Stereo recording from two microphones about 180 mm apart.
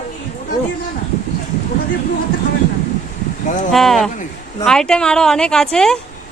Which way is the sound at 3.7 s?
Centre (ahead or behind).